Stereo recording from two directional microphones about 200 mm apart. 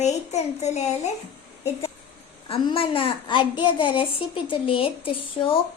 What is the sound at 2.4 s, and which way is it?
A child's voice, 25° left (ahead or behind).